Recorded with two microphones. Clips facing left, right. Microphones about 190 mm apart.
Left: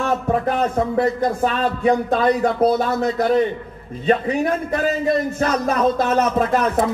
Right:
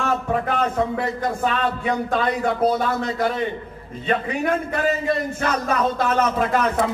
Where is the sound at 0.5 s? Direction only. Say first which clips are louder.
Left 2 dB; 40° left (ahead or behind).